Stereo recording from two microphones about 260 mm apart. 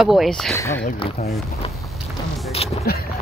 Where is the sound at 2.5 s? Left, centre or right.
Left.